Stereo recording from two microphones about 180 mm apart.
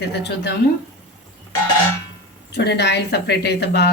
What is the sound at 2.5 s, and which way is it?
Speech, 65° left (ahead or behind).